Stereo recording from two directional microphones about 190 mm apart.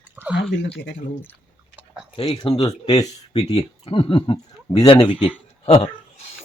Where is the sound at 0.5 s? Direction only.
70° left (ahead or behind).